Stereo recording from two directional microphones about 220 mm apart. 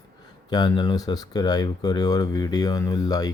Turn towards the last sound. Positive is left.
turn(degrees=15)  # may be behind; listen again after turning